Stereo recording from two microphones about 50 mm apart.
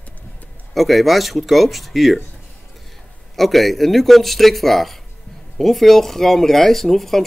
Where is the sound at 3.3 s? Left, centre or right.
Centre.